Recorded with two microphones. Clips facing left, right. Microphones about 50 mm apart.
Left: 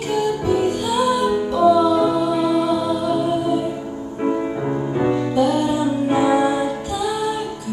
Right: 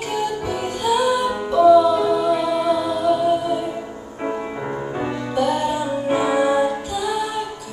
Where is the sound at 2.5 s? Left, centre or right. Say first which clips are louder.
Left 1 dB; centre.